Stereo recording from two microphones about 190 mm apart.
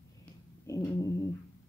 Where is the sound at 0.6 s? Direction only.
15° left (ahead or behind).